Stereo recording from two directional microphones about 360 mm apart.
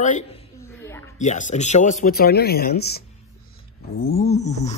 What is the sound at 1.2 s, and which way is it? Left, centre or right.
A man's voice, centre.